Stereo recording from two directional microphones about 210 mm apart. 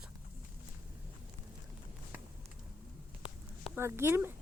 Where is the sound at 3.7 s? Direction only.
10° right (ahead or behind).